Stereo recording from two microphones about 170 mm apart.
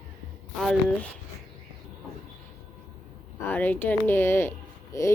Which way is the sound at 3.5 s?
10° left (ahead or behind).